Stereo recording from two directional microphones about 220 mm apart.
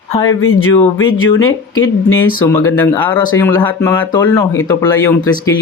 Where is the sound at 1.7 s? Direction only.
70° left (ahead or behind).